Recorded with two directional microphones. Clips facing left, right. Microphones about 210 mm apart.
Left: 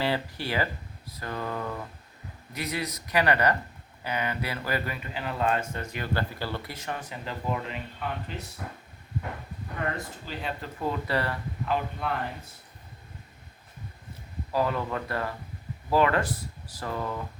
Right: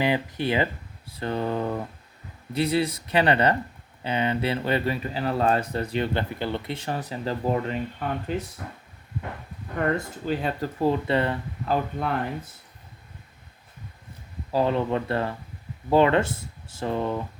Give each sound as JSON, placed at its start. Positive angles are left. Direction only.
{"t": 0.0, "sound": "speech", "side_deg": -20}
{"t": 10.2, "sound": "speech", "side_deg": -45}
{"t": 10.8, "sound": "speech", "side_deg": -25}
{"t": 11.6, "sound": "speech", "side_deg": -40}
{"t": 14.5, "sound": "speech", "side_deg": -30}